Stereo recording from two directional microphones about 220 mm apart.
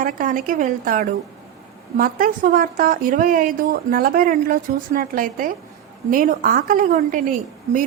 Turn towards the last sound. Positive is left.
turn(degrees=-35)  # may be behind; listen again after turning